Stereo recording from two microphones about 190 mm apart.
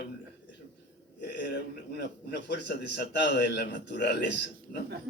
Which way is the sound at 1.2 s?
60° left (ahead or behind).